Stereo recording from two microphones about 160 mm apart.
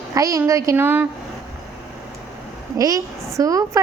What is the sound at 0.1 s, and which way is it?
Speech, 20° right (ahead or behind).